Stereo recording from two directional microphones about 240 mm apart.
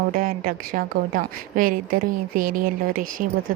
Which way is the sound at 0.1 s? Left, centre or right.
Right.